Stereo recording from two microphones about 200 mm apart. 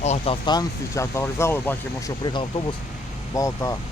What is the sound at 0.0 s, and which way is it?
Speech, 35° left (ahead or behind).